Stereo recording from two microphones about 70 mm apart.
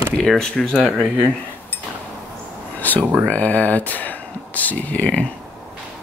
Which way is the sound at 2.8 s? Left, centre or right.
Left.